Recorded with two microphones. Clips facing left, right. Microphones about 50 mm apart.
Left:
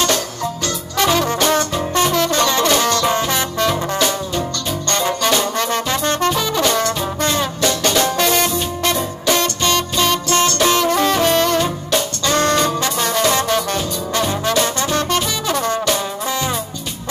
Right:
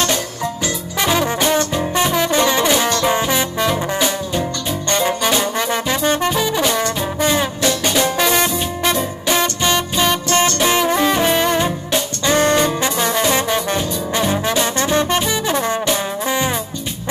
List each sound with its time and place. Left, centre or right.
0.9 s brass instrument: centre
7.6 s music: centre
14.9 s brass instrument: centre